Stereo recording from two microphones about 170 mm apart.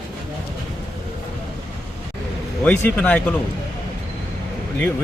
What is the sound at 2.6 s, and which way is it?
Speech, 10° left (ahead or behind).